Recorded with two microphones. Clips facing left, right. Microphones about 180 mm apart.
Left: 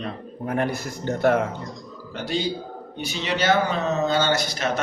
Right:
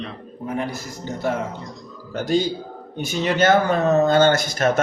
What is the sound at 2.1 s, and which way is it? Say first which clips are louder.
Speech: right 5 dB; 45° right (ahead or behind).